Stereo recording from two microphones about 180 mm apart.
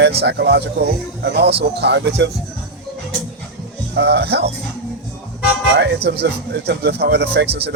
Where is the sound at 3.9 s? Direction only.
65° right (ahead or behind).